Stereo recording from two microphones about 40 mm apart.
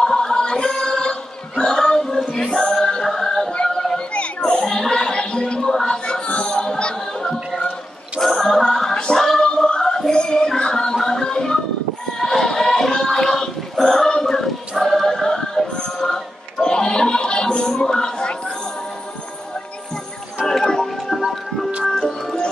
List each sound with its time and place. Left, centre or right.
0.0 s a sound: centre
2.3 s music: centre
4.1 s children playing: left
4.6 s music: centre
5.9 s gargling: left
8.2 s a sound: centre
8.9 s a capella: centre
9.2 s a sound: centre
9.6 s music: centre
12.2 s choir: centre
14.8 s choir: centre
15.0 s music: centre
20.4 s music: centre